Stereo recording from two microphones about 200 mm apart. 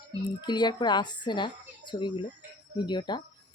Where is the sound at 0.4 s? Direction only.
20° left (ahead or behind).